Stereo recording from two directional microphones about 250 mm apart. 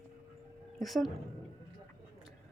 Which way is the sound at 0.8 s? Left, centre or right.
Centre.